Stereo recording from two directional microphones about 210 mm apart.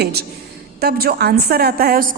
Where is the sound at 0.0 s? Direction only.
50° right (ahead or behind).